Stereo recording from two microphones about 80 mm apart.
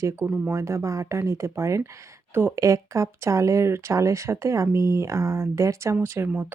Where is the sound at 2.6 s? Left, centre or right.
Right.